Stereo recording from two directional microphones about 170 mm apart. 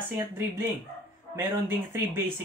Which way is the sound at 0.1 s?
15° right (ahead or behind).